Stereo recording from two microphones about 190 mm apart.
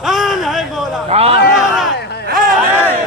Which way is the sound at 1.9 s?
60° left (ahead or behind).